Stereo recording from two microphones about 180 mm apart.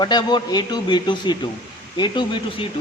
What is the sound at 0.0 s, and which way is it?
A man's voice, 25° left (ahead or behind).